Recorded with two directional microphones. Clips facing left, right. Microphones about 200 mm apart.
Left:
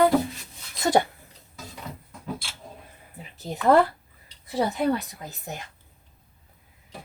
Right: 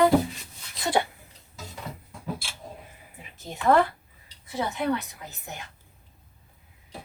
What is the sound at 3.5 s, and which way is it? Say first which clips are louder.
A woman's voice: left 2 dB; 35° left (ahead or behind).